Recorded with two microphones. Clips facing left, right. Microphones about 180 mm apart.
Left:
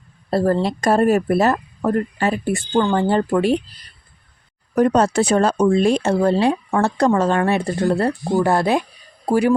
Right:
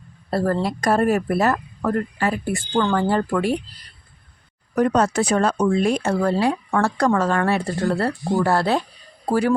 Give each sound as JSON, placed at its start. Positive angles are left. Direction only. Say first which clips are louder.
{"t": 0.3, "sound": "speech", "louder": "left 3 dB", "side_deg": 25}
{"t": 4.7, "sound": "a woman's voice", "louder": "left 3 dB", "side_deg": 30}